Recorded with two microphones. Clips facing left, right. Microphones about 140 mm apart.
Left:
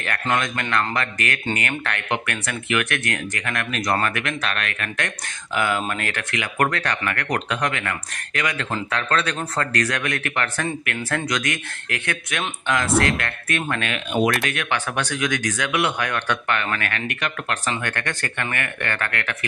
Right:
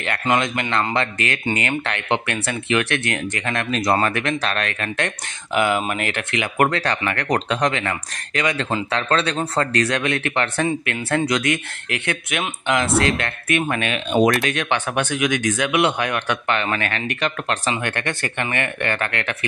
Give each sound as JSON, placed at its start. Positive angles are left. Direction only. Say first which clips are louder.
{"t": 0.0, "sound": "speech", "louder": "right 3 dB", "side_deg": -20}